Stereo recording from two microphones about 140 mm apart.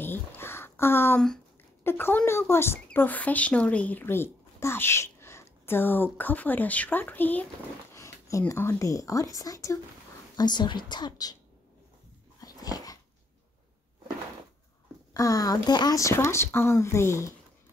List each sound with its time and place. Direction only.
0.0 s a sound: 15° left (ahead or behind)
1.9 s a woman's voice: 15° left (ahead or behind)
12.4 s dog: 25° left (ahead or behind)
15.1 s speech: 25° left (ahead or behind)